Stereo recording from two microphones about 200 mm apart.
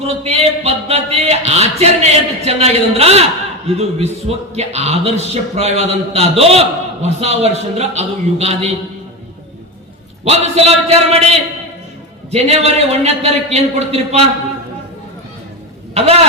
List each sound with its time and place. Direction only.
0.0 s speech: 30° right (ahead or behind)
10.2 s speech: 30° right (ahead or behind)
12.3 s speech: 30° right (ahead or behind)
16.0 s speech: 30° right (ahead or behind)